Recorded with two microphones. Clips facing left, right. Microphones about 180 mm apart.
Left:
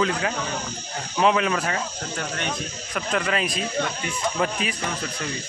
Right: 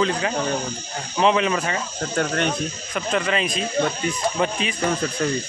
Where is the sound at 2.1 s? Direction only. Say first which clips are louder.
Right 10 dB; 50° right (ahead or behind).